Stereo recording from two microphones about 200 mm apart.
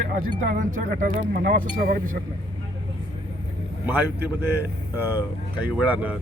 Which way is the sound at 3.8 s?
10° right (ahead or behind).